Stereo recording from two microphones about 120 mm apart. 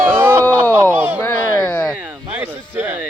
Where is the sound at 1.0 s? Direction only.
10° right (ahead or behind).